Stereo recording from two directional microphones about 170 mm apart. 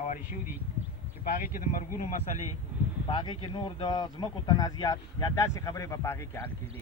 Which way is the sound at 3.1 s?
25° left (ahead or behind).